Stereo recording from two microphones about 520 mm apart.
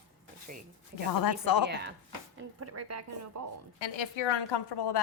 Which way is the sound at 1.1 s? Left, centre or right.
Left.